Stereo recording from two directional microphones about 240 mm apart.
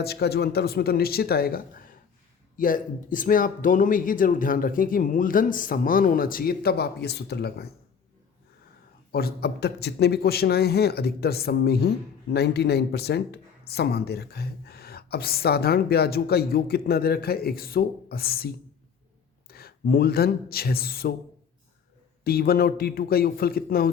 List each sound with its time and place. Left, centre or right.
0.0 s speech: left
9.1 s a man's voice: left
22.2 s speech: left